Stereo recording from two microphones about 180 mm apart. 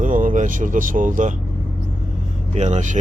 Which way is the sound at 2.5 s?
40° right (ahead or behind).